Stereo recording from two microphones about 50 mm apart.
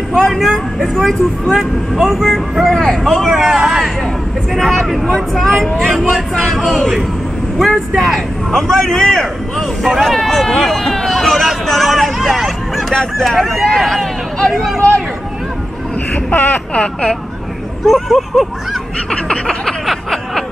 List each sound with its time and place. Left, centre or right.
0.1 s a man's voice: centre
11.1 s hubbub: centre
13.2 s speech: centre
16.1 s baby cry: left
16.7 s speech: left
17.8 s speech: centre
19.0 s snicker: centre